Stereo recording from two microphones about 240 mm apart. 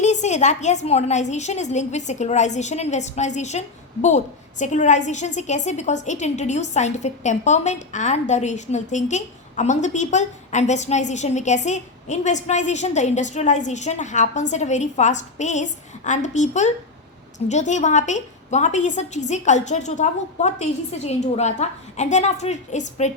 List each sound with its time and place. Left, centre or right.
0.0 s a woman's voice: left